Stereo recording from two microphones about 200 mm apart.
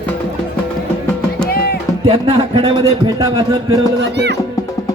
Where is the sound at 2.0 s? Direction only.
30° right (ahead or behind).